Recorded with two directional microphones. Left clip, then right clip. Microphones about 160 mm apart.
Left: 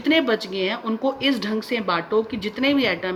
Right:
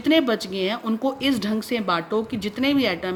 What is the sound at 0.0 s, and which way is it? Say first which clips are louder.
Speech: even; 55° right (ahead or behind).